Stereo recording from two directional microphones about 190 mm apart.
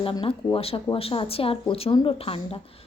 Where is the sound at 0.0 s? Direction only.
25° left (ahead or behind).